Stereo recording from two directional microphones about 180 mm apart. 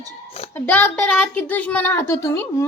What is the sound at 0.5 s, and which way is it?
A woman's voice, 10° left (ahead or behind).